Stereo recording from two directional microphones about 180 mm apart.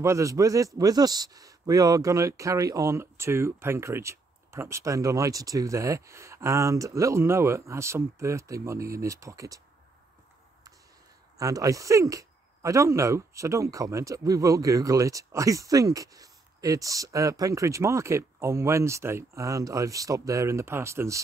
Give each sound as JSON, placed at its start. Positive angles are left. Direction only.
{"t": 0.0, "sound": "speech", "side_deg": -15}
{"t": 11.3, "sound": "speech", "side_deg": -20}